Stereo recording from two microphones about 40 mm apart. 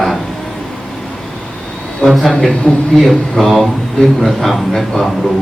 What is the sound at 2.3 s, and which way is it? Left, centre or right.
Speech, left.